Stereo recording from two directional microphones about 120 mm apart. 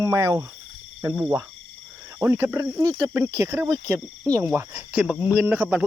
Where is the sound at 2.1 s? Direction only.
20° right (ahead or behind).